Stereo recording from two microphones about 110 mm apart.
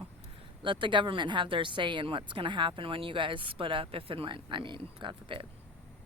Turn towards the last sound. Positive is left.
turn(degrees=-50)  # may be behind; listen again after turning